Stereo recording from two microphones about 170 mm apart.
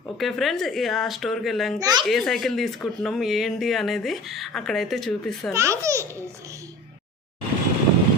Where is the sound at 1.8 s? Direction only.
20° right (ahead or behind).